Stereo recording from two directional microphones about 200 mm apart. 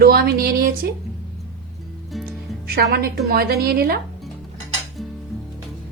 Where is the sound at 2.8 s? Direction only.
50° right (ahead or behind).